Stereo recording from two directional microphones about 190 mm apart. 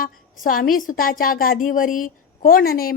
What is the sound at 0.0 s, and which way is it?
A woman's voice, 50° left (ahead or behind).